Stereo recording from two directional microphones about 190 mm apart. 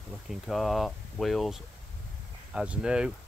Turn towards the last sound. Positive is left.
turn(degrees=-5)  # may be behind; listen again after turning